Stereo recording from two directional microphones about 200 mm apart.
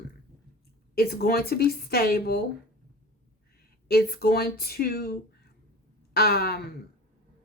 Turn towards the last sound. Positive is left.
turn(degrees=50)  # may be behind; listen again after turning